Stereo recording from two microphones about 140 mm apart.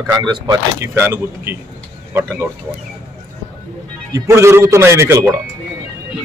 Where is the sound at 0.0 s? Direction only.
30° right (ahead or behind).